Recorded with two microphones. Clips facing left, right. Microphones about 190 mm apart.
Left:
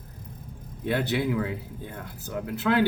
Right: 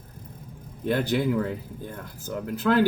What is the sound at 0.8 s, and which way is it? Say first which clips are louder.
Speech: right 2 dB; 45° right (ahead or behind).